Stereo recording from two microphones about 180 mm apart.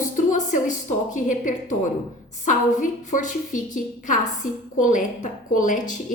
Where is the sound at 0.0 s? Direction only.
45° left (ahead or behind).